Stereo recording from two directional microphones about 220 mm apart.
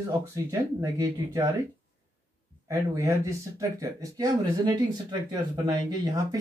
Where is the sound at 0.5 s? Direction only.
15° right (ahead or behind).